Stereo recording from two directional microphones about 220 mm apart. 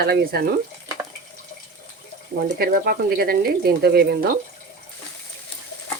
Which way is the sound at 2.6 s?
40° right (ahead or behind).